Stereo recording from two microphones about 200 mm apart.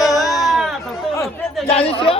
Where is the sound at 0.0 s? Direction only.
Centre (ahead or behind).